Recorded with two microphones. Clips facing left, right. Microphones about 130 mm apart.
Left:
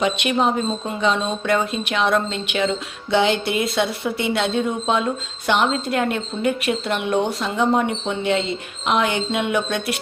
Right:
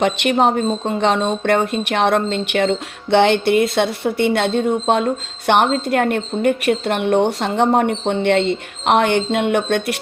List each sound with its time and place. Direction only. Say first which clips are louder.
0.0 s speech: right 4 dB; 60° right (ahead or behind)